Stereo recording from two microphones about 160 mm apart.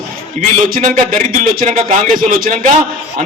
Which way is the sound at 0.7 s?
55° right (ahead or behind).